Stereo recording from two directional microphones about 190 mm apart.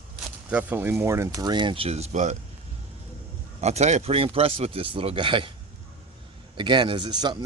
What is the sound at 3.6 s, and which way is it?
Speech, 35° right (ahead or behind).